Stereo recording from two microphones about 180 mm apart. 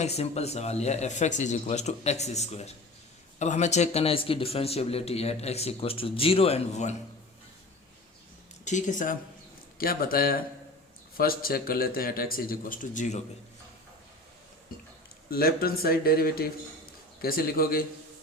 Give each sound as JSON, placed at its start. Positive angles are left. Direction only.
{"t": 0.0, "sound": "speech", "side_deg": 35}
{"t": 8.6, "sound": "a man's voice", "side_deg": 45}
{"t": 15.3, "sound": "speech", "side_deg": 55}